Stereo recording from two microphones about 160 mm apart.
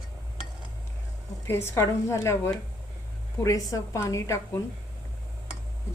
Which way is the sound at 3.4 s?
20° left (ahead or behind).